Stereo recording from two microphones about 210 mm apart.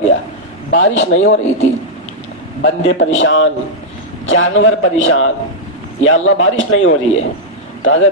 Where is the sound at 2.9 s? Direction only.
65° left (ahead or behind).